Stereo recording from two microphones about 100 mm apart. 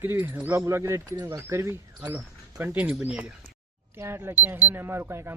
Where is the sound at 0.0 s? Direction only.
20° right (ahead or behind).